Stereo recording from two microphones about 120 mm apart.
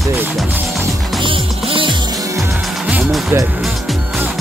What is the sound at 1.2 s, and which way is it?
Music, 45° right (ahead or behind).